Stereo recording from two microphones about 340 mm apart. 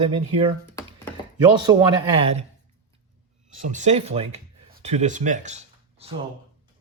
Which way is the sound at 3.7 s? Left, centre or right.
Right.